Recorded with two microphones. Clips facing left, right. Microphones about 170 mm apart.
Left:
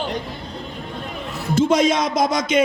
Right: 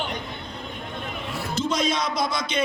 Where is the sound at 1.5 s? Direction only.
50° left (ahead or behind).